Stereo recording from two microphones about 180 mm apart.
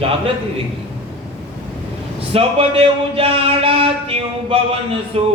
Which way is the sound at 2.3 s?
30° right (ahead or behind).